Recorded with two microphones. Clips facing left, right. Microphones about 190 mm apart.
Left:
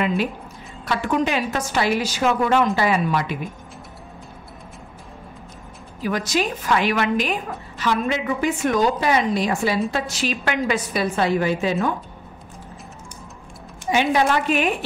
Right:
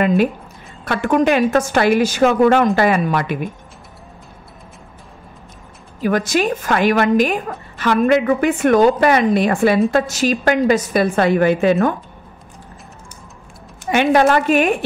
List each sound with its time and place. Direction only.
0.8 s a woman's voice: 55° right (ahead or behind)
6.0 s a woman's voice: 55° right (ahead or behind)
13.8 s a woman's voice: 60° right (ahead or behind)